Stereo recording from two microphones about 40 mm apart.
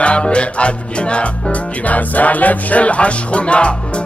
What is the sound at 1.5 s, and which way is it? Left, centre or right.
Music, left.